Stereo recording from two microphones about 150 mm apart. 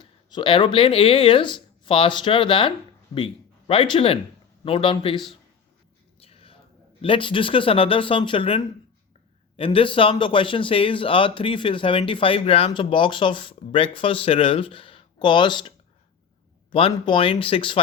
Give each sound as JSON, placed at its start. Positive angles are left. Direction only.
{"t": 0.0, "sound": "a man's voice", "side_deg": 30}
{"t": 6.1, "sound": "a sound", "side_deg": 40}
{"t": 7.0, "sound": "a man's voice", "side_deg": 35}
{"t": 16.7, "sound": "a man's voice", "side_deg": 35}